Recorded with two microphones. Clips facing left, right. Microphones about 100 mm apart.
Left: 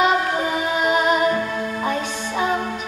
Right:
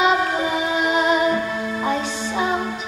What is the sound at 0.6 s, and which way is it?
Music, 45° left (ahead or behind).